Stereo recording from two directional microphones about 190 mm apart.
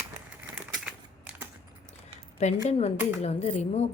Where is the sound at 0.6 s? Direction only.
5° right (ahead or behind).